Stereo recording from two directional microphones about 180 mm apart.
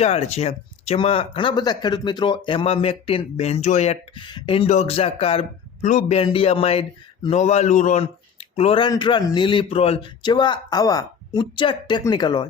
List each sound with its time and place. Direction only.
0.0 s speech: 35° left (ahead or behind)